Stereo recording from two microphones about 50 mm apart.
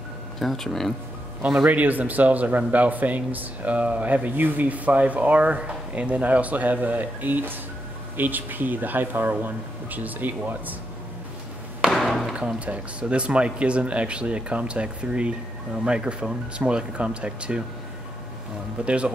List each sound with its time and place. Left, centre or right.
0.4 s speech: centre
1.7 s speech: right
11.9 s chop: centre
12.5 s speech: right
18.9 s speech: right